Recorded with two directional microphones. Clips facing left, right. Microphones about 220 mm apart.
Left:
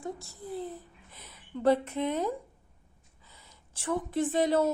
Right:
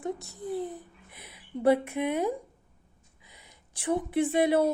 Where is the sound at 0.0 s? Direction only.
20° right (ahead or behind).